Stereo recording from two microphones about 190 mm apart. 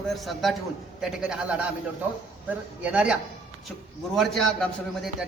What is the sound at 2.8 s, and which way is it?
A woman's voice, 5° right (ahead or behind).